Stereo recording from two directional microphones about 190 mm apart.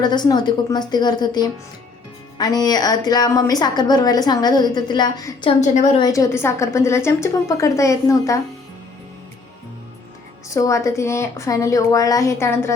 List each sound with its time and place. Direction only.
0.0 s a woman's voice: 20° left (ahead or behind)
5.5 s a woman's voice: 40° left (ahead or behind)
6.0 s a woman's voice: 15° left (ahead or behind)
10.5 s a woman's voice: 15° left (ahead or behind)